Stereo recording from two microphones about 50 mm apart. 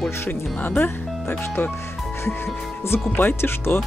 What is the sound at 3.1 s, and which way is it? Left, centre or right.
Speech, left.